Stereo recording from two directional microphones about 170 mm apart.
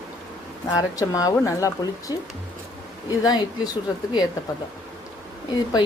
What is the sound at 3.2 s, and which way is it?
Speech, 25° left (ahead or behind).